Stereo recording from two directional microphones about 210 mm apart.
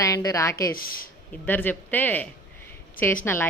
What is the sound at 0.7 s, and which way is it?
Speech, 45° left (ahead or behind).